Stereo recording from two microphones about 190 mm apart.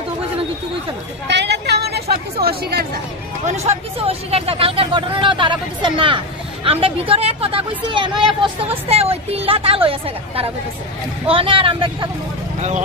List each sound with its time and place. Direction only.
1.2 s a sound: 65° right (ahead or behind)
2.4 s speech: 55° right (ahead or behind)
3.4 s a woman's voice: 35° right (ahead or behind)